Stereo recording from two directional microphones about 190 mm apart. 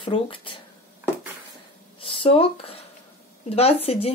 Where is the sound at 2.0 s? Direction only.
30° left (ahead or behind).